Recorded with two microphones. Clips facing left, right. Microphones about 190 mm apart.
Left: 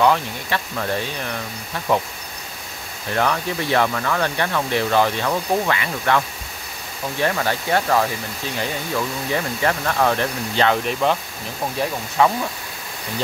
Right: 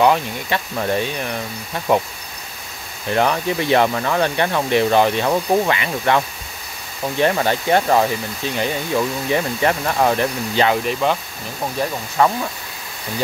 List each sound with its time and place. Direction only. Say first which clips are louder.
0.0 s speech: right 2 dB; 20° right (ahead or behind)
3.1 s speech: right 3 dB; 20° right (ahead or behind)
10.9 s speech: right 1 dB; centre (ahead or behind)
12.2 s speech: right 1 dB; centre (ahead or behind)